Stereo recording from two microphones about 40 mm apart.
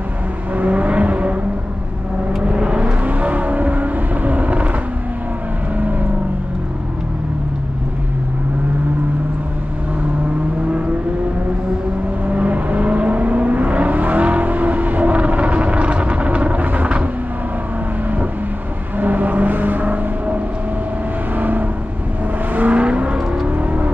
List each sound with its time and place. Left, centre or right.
0.6 s vehicle: right
2.4 s vehicle: right
12.3 s vehicle: right
18.9 s vehicle: right
21.4 s vehicle: right
22.8 s vehicle: right